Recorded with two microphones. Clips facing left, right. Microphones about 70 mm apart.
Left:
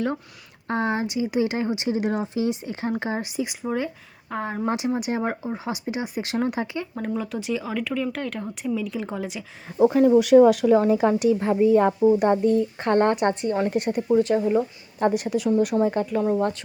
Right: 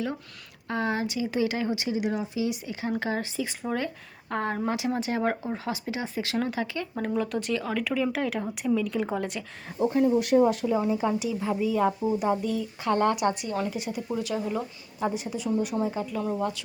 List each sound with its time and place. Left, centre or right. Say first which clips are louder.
0.7 s speech: left 3 dB; left
1.9 s speech: left 4 dB; left
2.9 s speech: even; left; by 4.6 s centre
4.6 s speech: left 3 dB; left
5.3 s speech: left 1 dB; centre
5.6 s speech: left 5 dB; left
6.9 s speech: right 2 dB; centre
9.8 s speech: left 6 dB; left
12.4 s speech: left 9 dB; left
13.7 s speech: left 9 dB; left
15.0 s speech: left 7 dB; left